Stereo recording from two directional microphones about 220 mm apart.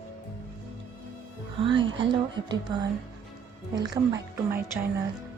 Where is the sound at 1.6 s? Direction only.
20° right (ahead or behind).